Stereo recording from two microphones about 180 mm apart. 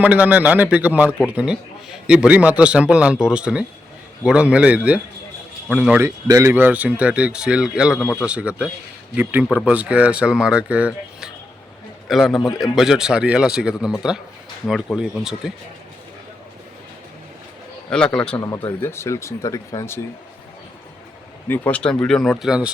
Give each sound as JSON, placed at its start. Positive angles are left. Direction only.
{"t": 0.0, "sound": "a man's voice", "side_deg": -10}
{"t": 6.1, "sound": "a man's voice", "side_deg": -15}
{"t": 7.9, "sound": "speech", "side_deg": 10}
{"t": 8.3, "sound": "a man's voice", "side_deg": -5}
{"t": 17.9, "sound": "speech", "side_deg": 5}
{"t": 18.3, "sound": "speech", "side_deg": 20}
{"t": 21.4, "sound": "speech", "side_deg": 10}